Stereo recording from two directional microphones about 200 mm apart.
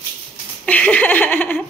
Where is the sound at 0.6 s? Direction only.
5° left (ahead or behind).